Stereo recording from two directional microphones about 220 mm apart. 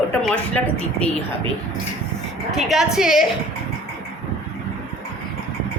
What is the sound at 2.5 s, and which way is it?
Speech, centre (ahead or behind).